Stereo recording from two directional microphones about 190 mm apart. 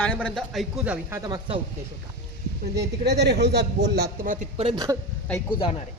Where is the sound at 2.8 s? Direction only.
60° right (ahead or behind).